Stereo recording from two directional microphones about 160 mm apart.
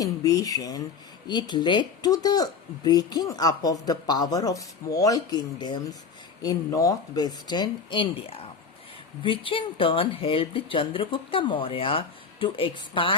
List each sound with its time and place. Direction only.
0.0 s speech: 20° left (ahead or behind)